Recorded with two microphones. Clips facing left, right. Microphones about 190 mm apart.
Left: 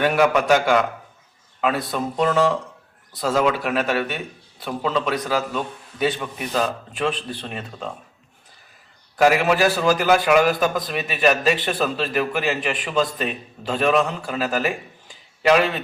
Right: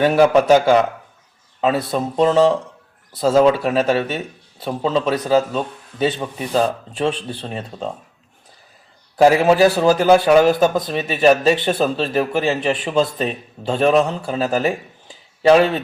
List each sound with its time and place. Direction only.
0.0 s a man's voice: 30° right (ahead or behind)
9.1 s a man's voice: 30° right (ahead or behind)